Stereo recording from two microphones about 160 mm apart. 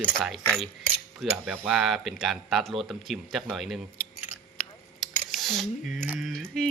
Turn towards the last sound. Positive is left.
turn(degrees=0)  # may be behind; listen again after turning